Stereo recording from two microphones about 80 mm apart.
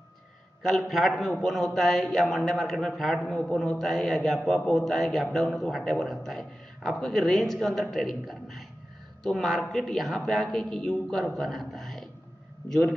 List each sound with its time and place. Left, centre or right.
0.6 s a man's voice: centre